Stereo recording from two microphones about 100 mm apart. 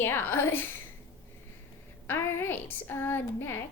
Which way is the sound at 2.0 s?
20° left (ahead or behind).